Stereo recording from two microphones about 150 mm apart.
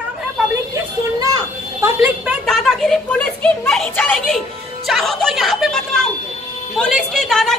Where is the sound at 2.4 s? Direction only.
5° left (ahead or behind).